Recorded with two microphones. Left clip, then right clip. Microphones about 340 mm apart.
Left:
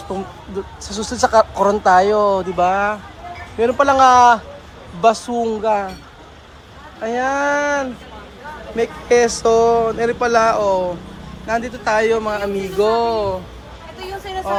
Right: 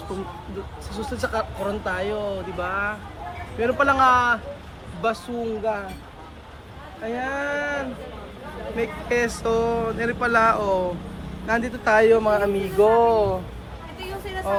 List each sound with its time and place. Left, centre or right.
0.9 s speech: centre
7.2 s speech: centre